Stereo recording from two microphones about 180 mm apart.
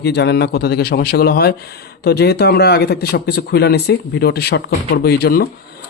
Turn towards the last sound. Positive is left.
turn(degrees=60)  # may be behind; listen again after turning